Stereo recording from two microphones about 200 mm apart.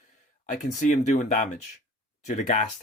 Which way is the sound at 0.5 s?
35° left (ahead or behind).